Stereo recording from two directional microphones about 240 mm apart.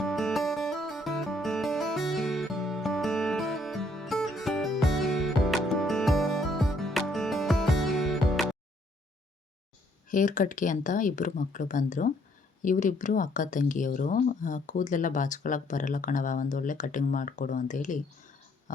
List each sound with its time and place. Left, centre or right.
0.0 s music: centre
10.1 s speech: left